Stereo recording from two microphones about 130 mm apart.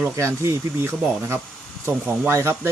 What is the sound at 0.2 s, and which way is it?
Speech, 20° right (ahead or behind).